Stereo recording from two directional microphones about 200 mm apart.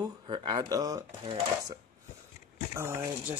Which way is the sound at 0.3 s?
20° right (ahead or behind).